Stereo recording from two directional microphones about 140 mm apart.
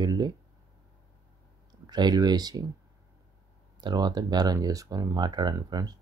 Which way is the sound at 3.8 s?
30° right (ahead or behind).